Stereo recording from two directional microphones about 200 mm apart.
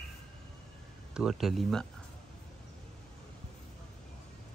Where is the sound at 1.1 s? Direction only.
5° right (ahead or behind).